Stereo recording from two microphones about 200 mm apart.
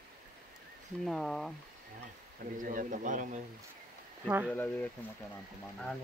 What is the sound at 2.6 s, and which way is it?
Speech, 40° right (ahead or behind).